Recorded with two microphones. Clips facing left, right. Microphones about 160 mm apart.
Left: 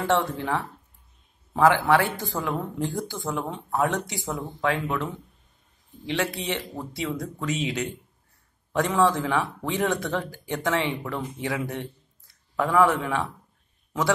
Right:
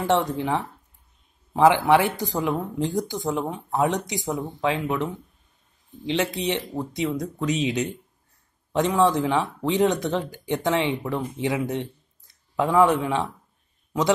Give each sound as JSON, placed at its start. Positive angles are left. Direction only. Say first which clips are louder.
{"t": 0.0, "sound": "speech", "louder": "right 2 dB", "side_deg": -15}